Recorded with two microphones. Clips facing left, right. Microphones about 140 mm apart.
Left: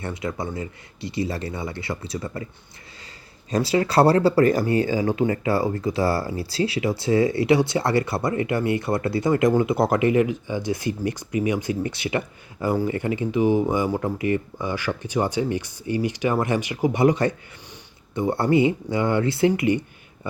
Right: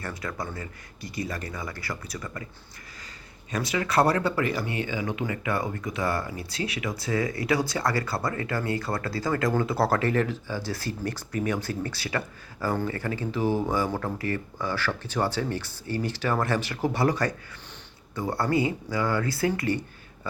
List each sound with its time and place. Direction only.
0.0 s speech: 20° left (ahead or behind)
3.5 s speech: 30° left (ahead or behind)